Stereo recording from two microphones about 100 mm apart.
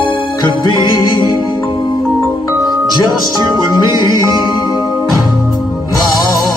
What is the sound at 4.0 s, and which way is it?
Music, 50° left (ahead or behind).